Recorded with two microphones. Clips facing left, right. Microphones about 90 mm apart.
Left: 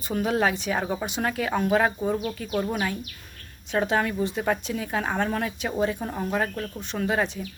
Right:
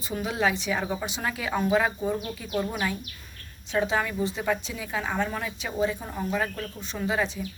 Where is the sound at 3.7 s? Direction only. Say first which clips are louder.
Left 2 dB; 50° left (ahead or behind).